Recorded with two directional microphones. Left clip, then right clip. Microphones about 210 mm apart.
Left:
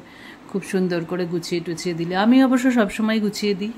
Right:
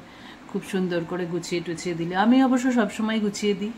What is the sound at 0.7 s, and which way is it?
Speech, 30° left (ahead or behind).